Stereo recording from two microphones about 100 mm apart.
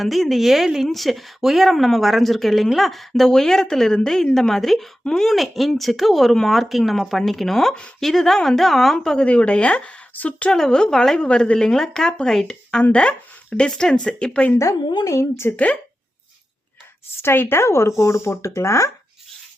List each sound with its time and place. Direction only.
0.0 s speech: centre (ahead or behind)
14.8 s a woman's voice: 45° left (ahead or behind)
15.1 s speech: 30° left (ahead or behind)
17.2 s speech: 25° left (ahead or behind)